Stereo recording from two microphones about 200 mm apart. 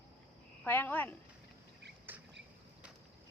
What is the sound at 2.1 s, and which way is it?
Cricket, 10° right (ahead or behind).